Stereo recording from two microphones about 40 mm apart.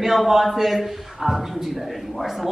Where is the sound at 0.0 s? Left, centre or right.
Centre.